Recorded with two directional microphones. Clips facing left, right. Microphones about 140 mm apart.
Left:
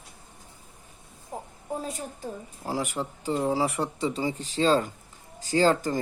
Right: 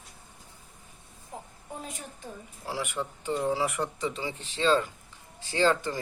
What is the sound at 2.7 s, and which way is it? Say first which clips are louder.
Speech: left 3 dB; 40° left (ahead or behind).